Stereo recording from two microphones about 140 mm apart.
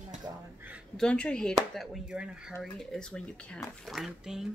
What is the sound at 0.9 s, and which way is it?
Speech, 5° left (ahead or behind).